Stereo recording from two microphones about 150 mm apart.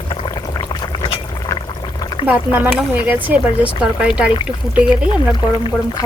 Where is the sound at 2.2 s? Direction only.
10° right (ahead or behind).